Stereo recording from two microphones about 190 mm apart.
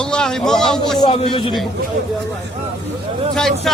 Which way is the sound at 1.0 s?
30° left (ahead or behind).